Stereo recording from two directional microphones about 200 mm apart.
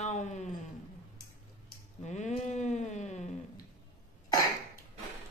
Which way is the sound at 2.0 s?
35° left (ahead or behind).